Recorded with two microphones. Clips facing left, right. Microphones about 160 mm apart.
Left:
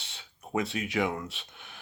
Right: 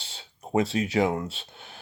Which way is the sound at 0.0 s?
30° right (ahead or behind).